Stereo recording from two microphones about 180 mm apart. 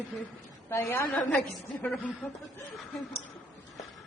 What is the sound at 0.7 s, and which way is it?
A man's voice, 15° left (ahead or behind).